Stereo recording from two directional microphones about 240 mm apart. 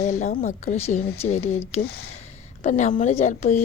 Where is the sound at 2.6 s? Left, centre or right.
Left.